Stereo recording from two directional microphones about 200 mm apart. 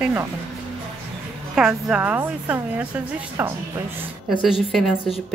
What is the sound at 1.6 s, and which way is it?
A woman's voice, 5° right (ahead or behind).